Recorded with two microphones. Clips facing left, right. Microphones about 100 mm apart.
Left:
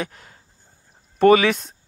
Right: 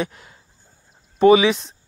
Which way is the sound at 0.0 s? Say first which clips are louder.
Right 3 dB; 40° left (ahead or behind).